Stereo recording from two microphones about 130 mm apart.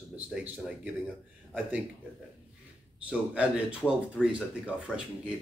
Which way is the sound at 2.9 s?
10° right (ahead or behind).